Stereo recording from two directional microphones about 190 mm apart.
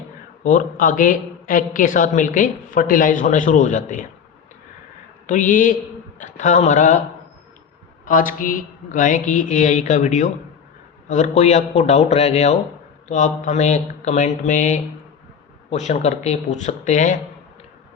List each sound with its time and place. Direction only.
0.4 s a woman's voice: 45° left (ahead or behind)
5.2 s a woman's voice: 45° left (ahead or behind)
8.0 s speech: 45° left (ahead or behind)